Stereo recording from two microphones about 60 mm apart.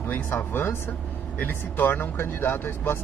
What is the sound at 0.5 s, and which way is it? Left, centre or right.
Speech, left.